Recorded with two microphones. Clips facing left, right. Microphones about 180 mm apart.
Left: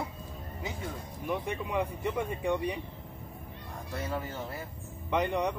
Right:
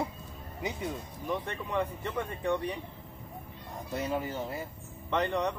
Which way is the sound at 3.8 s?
20° right (ahead or behind).